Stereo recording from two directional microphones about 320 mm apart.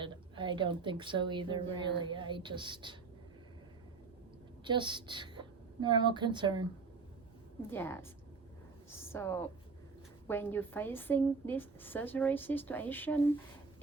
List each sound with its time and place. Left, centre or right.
0.0 s a woman's voice: centre
4.6 s a woman's voice: centre
7.7 s a woman's voice: centre